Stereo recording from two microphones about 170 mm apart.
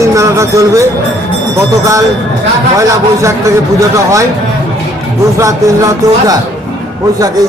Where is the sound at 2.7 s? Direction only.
20° right (ahead or behind).